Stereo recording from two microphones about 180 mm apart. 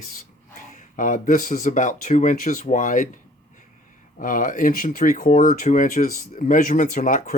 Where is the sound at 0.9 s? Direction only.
45° left (ahead or behind).